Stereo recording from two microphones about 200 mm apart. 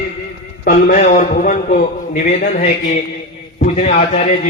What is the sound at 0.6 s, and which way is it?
A man's voice, 40° left (ahead or behind).